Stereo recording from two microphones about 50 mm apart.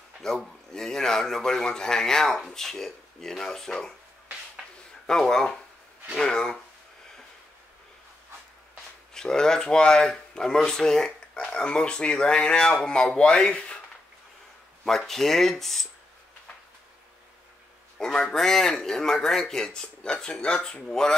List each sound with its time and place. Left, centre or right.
0.2 s speech: centre
5.0 s speech: centre
9.1 s speech: centre
14.9 s speech: centre
17.9 s speech: centre